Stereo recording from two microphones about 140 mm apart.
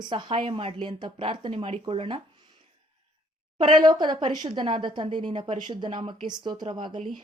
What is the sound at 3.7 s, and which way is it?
Speech, 30° right (ahead or behind).